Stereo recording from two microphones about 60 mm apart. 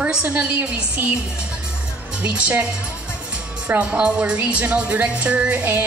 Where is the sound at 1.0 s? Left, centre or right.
Right.